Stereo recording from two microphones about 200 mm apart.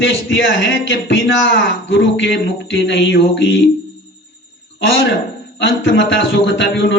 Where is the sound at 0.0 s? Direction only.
70° left (ahead or behind).